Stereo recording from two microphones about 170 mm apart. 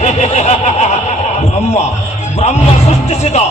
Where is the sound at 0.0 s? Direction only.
40° left (ahead or behind).